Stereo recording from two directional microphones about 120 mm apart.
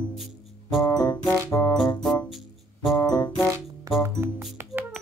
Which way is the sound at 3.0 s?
30° left (ahead or behind).